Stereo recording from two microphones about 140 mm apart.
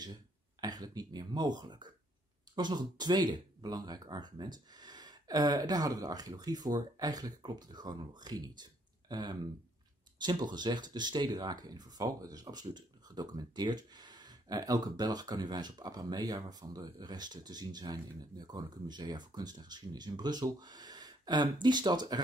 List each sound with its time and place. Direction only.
0.0 s speech: 30° right (ahead or behind)